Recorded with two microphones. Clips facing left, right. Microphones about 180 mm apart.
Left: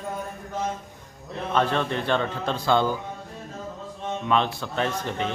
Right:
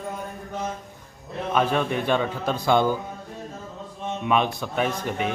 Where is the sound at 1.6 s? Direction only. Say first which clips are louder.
Right 1 dB; 10° right (ahead or behind).